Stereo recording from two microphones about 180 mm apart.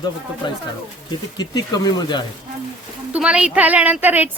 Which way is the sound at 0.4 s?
25° left (ahead or behind).